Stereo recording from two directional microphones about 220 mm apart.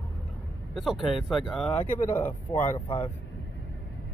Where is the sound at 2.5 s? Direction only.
25° left (ahead or behind).